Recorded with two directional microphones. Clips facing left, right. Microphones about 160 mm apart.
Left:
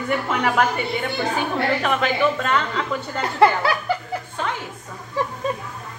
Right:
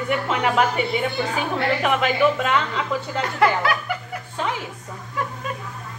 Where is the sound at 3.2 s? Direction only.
30° left (ahead or behind).